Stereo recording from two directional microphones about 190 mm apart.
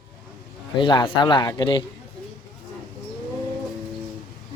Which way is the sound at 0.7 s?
25° left (ahead or behind).